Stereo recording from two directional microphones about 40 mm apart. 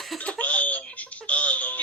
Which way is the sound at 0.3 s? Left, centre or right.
Left.